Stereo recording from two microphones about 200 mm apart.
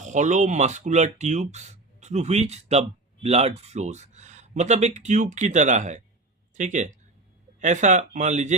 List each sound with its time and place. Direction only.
0.0 s speech: 35° right (ahead or behind)